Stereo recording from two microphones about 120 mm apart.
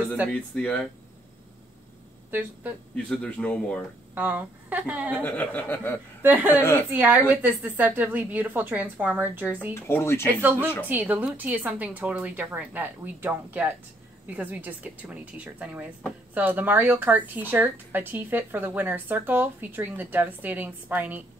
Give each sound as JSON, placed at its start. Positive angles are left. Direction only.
{"t": 0.3, "sound": "speech", "side_deg": 10}
{"t": 3.0, "sound": "speech", "side_deg": 10}
{"t": 4.1, "sound": "speech", "side_deg": -15}
{"t": 5.2, "sound": "speech", "side_deg": 15}
{"t": 6.2, "sound": "speech", "side_deg": -15}
{"t": 6.6, "sound": "speech", "side_deg": 20}
{"t": 6.9, "sound": "speech", "side_deg": -15}
{"t": 9.8, "sound": "speech", "side_deg": 20}
{"t": 10.8, "sound": "speech", "side_deg": -15}